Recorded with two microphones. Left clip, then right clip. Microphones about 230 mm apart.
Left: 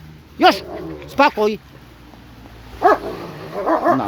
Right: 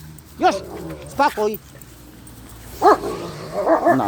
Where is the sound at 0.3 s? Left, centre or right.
Left.